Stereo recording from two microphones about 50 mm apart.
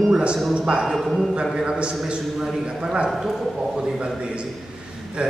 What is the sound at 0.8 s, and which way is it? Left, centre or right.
Speech, centre.